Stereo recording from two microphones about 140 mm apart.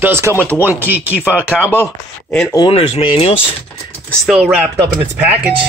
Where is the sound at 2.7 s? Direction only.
45° left (ahead or behind).